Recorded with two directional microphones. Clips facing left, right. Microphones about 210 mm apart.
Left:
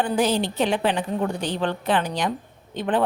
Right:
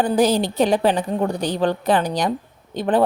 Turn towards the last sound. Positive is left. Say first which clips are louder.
# right 4 dB
turn(degrees=-40)  # may be behind; listen again after turning